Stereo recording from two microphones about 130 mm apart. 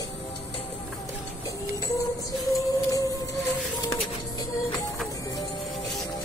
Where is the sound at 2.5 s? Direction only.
25° left (ahead or behind).